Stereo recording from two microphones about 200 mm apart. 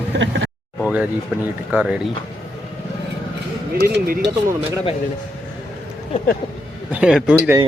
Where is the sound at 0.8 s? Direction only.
5° right (ahead or behind).